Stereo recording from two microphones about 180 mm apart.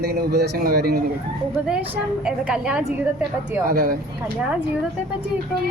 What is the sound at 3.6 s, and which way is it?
Speech, 55° right (ahead or behind).